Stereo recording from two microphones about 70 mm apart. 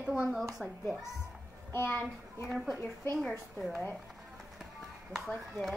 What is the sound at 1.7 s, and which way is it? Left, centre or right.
Speech, left.